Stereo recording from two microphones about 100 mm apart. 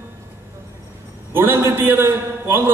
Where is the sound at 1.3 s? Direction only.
25° right (ahead or behind).